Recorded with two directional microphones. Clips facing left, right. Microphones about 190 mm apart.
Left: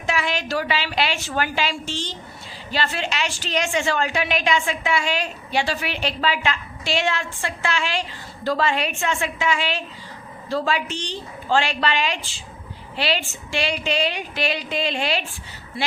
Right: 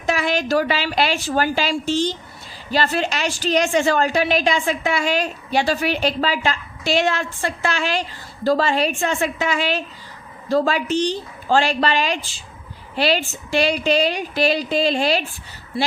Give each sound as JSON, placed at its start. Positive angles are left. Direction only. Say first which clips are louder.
{"t": 0.0, "sound": "a woman's voice", "louder": "right 4 dB", "side_deg": -40}